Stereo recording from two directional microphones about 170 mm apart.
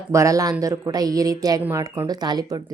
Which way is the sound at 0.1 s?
20° right (ahead or behind).